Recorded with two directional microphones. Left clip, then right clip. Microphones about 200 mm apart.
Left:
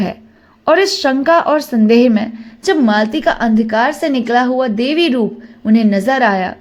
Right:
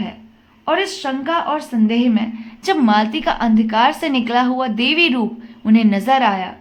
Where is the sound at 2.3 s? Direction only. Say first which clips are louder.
Left 4 dB; 25° left (ahead or behind).